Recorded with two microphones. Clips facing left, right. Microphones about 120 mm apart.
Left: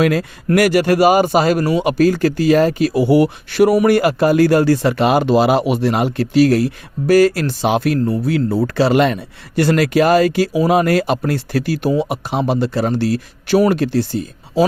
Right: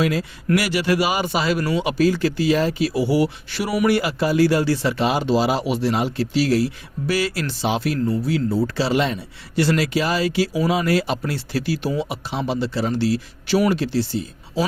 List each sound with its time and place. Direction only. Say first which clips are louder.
0.0 s a man's voice: left 5 dB; 60° left (ahead or behind)